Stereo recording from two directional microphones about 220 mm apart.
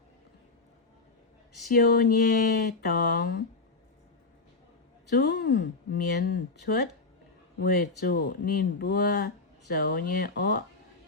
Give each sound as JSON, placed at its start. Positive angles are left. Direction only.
{"t": 1.7, "sound": "speech", "side_deg": 40}
{"t": 5.0, "sound": "speech", "side_deg": 50}